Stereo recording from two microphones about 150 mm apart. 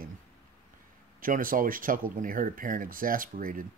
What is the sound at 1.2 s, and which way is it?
Speech, 65° right (ahead or behind).